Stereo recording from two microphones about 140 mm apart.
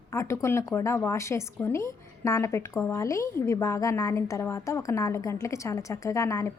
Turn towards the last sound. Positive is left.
turn(degrees=20)  # may be behind; listen again after turning